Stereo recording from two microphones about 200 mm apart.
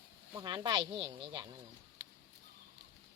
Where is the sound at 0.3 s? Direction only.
25° right (ahead or behind).